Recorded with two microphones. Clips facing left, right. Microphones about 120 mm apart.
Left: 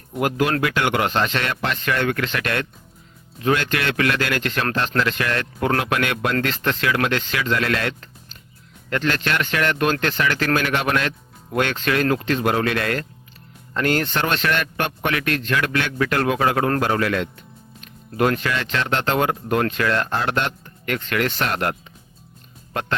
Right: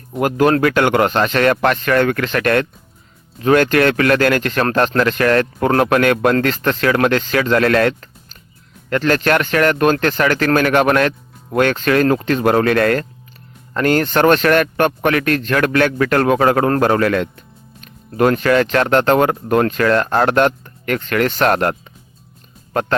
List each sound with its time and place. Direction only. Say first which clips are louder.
0.2 s speech: right 6 dB; 45° right (ahead or behind)